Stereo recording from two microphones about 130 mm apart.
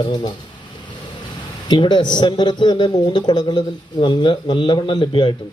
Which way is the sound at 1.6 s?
35° left (ahead or behind).